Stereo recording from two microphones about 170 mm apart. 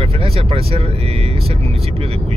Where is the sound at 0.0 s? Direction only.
35° right (ahead or behind).